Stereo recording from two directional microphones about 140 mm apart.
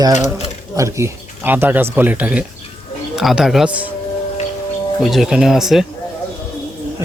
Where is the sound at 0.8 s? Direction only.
20° right (ahead or behind).